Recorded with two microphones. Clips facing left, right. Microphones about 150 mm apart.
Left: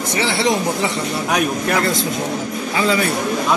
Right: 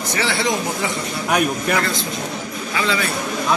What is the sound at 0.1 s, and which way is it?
Speech, 25° left (ahead or behind).